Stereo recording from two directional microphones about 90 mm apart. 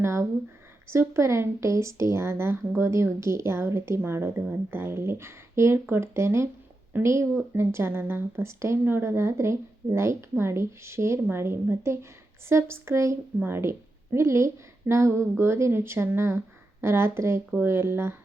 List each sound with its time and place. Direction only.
0.0 s speech: 30° right (ahead or behind)